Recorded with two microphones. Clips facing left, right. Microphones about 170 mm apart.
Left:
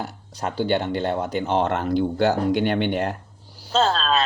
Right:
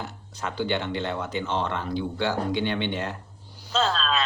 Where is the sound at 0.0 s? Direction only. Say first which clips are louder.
Left 5 dB; 35° left (ahead or behind); by 3.1 s 55° left (ahead or behind).